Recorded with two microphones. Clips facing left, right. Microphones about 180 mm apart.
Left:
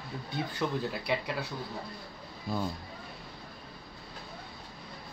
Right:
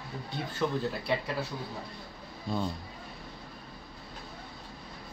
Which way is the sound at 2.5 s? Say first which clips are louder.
Right 1 dB; 5° left (ahead or behind).